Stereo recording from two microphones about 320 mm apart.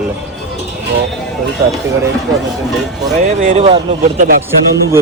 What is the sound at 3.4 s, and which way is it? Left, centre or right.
Speech, right.